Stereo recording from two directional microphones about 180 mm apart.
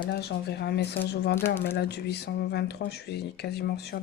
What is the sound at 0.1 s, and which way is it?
Speech, 65° left (ahead or behind).